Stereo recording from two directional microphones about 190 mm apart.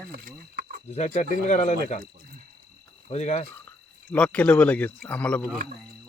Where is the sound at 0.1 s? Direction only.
55° right (ahead or behind).